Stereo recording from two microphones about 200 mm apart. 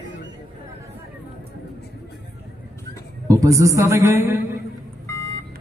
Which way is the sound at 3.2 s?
15° right (ahead or behind).